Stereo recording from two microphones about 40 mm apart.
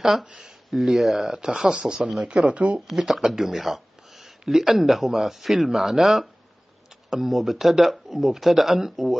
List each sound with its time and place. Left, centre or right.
0.2 s speech: centre
2.9 s speech: centre